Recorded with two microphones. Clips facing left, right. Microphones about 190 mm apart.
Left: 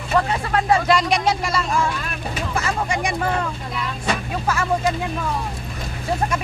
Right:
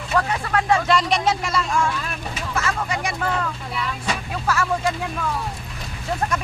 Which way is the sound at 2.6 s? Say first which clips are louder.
Left 2 dB; 15° left (ahead or behind).